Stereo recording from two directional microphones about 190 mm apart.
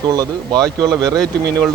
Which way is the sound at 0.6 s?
5° left (ahead or behind).